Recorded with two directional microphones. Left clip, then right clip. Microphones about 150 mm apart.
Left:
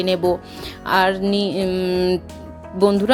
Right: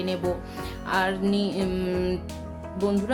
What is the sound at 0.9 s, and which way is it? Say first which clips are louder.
Speech: left 8 dB; 50° left (ahead or behind).